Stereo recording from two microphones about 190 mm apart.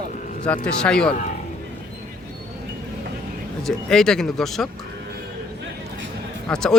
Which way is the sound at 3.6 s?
Centre (ahead or behind).